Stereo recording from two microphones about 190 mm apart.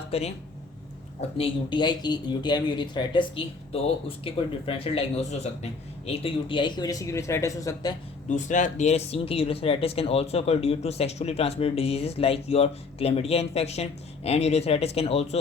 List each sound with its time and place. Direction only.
0.1 s speech: 35° left (ahead or behind)
1.4 s speech: 25° left (ahead or behind)
8.3 s speech: 40° left (ahead or behind)